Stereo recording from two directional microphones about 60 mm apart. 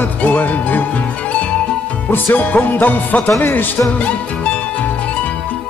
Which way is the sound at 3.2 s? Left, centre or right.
Left.